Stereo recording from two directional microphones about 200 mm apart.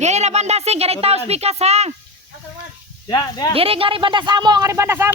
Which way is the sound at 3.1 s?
20° left (ahead or behind).